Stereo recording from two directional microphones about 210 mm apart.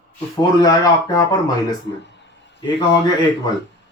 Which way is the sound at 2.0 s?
55° left (ahead or behind).